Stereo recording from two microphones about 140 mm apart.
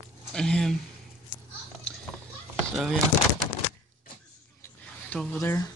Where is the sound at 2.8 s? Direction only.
Centre (ahead or behind).